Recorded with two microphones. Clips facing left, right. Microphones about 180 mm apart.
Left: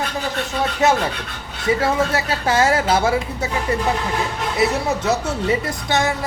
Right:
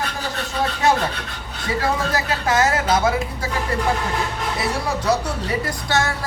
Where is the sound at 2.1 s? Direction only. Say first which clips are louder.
Left 1 dB; 30° left (ahead or behind).